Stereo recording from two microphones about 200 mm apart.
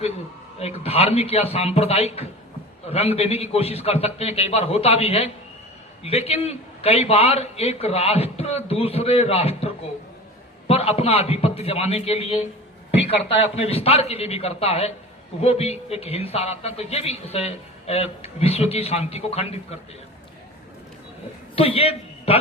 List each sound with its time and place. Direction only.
0.6 s a man's voice: 30° left (ahead or behind)
13.6 s a man's voice: 30° left (ahead or behind)
21.5 s a man's voice: 30° left (ahead or behind)